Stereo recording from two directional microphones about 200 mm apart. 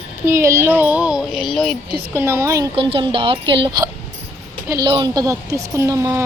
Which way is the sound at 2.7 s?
30° right (ahead or behind).